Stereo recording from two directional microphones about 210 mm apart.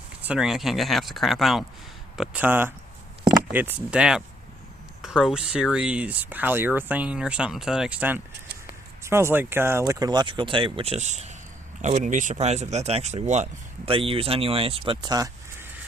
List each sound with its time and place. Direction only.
0.2 s speech: 5° right (ahead or behind)